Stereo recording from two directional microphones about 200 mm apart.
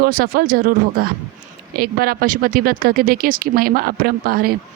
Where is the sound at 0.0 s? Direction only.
45° right (ahead or behind).